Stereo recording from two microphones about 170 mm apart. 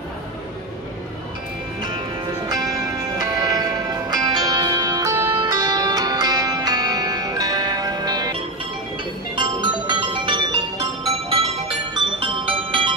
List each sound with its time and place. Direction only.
2.4 s music: 20° right (ahead or behind)